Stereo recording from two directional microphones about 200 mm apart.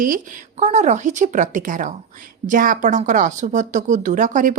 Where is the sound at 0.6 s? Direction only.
35° right (ahead or behind).